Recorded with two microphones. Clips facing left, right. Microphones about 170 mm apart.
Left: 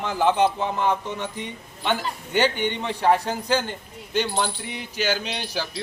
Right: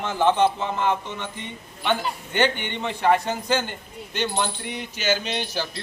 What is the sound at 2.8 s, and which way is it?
Speech, 5° left (ahead or behind).